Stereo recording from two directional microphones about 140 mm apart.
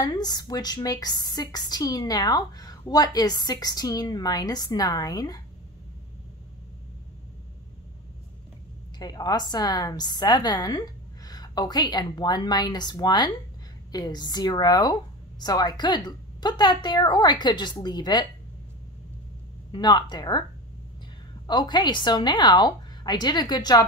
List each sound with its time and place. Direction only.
0.0 s a woman's voice: 30° left (ahead or behind)
8.9 s a woman's voice: 30° left (ahead or behind)
19.7 s speech: 30° left (ahead or behind)
21.5 s speech: 30° left (ahead or behind)